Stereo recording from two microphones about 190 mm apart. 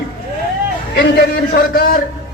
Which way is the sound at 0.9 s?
55° left (ahead or behind).